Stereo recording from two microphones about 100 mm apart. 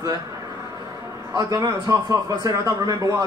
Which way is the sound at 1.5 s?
35° right (ahead or behind).